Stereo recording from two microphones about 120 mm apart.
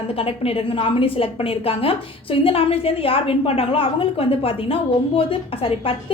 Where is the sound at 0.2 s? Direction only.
50° left (ahead or behind).